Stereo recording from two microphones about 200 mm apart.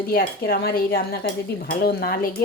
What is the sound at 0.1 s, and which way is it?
Speech, 50° left (ahead or behind).